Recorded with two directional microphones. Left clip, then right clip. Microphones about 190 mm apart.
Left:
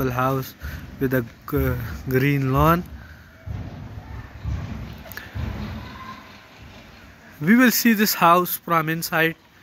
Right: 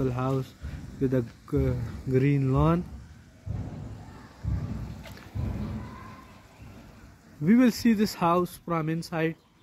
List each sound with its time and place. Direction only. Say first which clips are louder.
0.0 s speech: left 7 dB; centre (ahead or behind)
7.4 s speech: left 6 dB; 5° right (ahead or behind)